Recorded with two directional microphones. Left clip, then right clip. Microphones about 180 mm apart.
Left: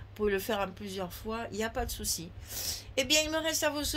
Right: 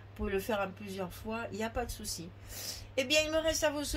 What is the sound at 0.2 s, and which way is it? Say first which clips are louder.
Speech: left 3 dB; 50° left (ahead or behind).